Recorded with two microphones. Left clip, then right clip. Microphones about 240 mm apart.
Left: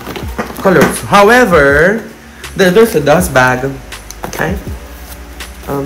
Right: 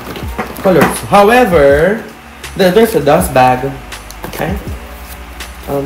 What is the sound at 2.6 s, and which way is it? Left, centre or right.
Speech, centre.